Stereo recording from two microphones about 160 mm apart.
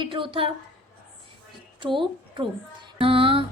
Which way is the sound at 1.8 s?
30° right (ahead or behind).